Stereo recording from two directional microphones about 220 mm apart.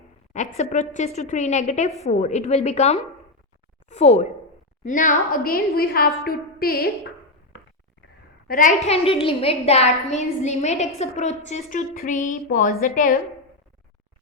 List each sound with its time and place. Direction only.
0.3 s a woman's voice: 30° left (ahead or behind)
8.4 s a woman's voice: 35° left (ahead or behind)